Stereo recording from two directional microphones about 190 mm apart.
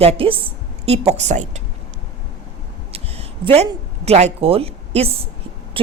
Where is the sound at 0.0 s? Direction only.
30° right (ahead or behind).